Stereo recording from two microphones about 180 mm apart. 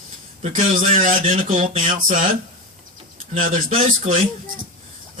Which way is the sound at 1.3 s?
35° right (ahead or behind).